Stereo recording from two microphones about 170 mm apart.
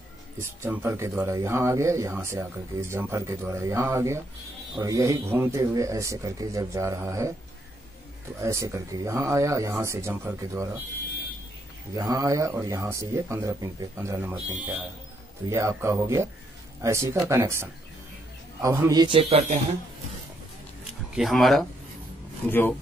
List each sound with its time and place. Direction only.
0.4 s speech: 15° right (ahead or behind)
8.4 s speech: 15° right (ahead or behind)
11.9 s speech: 20° right (ahead or behind)
15.5 s a man's voice: 15° right (ahead or behind); by 19.6 s 35° right (ahead or behind)
21.1 s speech: centre (ahead or behind)
22.5 s speech: 10° left (ahead or behind)